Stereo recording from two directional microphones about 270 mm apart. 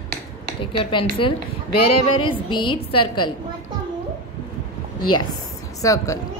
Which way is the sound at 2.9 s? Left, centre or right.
Left.